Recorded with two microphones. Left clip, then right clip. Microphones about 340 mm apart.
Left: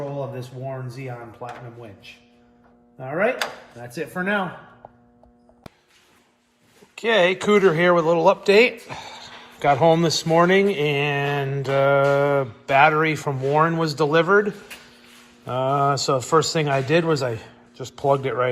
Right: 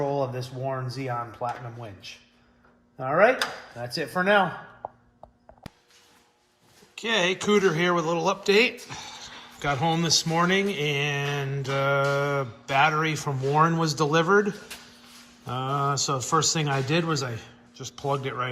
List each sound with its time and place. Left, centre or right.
0.2 s speech: right
3.0 s speech: right
6.9 s speech: centre